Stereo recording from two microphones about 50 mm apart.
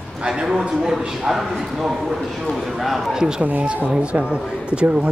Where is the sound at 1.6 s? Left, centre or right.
Centre.